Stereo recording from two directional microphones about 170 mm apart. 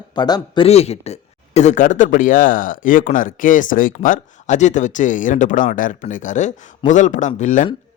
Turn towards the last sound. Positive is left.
turn(degrees=50)  # may be behind; listen again after turning